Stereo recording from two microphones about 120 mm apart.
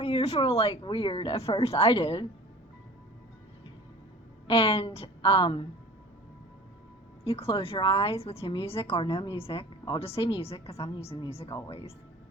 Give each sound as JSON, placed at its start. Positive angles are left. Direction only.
{"t": 0.0, "sound": "speech", "side_deg": 55}
{"t": 0.8, "sound": "a woman's voice", "side_deg": 45}
{"t": 4.4, "sound": "a woman's voice", "side_deg": 50}
{"t": 7.3, "sound": "a woman's voice", "side_deg": 50}